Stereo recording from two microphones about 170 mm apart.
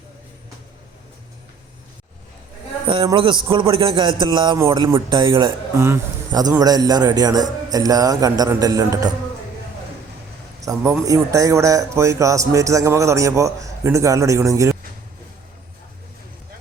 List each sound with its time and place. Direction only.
2.8 s a man's voice: 30° right (ahead or behind)
10.6 s a man's voice: 20° right (ahead or behind)